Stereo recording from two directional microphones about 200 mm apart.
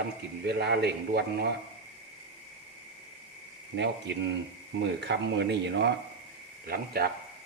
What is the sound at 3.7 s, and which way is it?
A man's voice, 60° right (ahead or behind).